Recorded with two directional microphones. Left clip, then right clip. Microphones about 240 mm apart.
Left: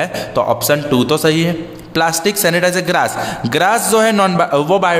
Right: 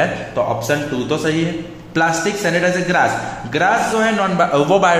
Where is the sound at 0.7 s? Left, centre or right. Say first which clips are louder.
Left 5 dB; left.